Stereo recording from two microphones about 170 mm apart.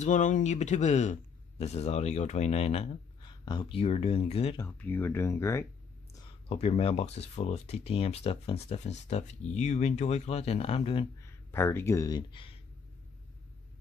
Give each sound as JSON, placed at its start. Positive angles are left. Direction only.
{"t": 0.0, "sound": "speech", "side_deg": 45}
{"t": 4.6, "sound": "speech", "side_deg": 15}
{"t": 6.5, "sound": "speech", "side_deg": 35}
{"t": 11.2, "sound": "speech", "side_deg": 15}